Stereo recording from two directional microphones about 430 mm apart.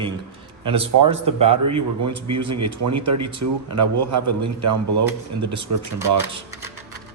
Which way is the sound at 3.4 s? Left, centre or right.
Right.